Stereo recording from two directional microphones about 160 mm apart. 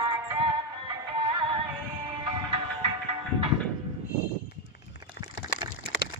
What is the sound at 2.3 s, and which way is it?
Music, 35° right (ahead or behind).